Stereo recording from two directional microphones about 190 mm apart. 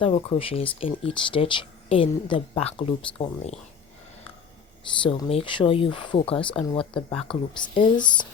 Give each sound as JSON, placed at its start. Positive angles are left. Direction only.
{"t": 0.0, "sound": "speech", "side_deg": 30}
{"t": 5.0, "sound": "speech", "side_deg": 30}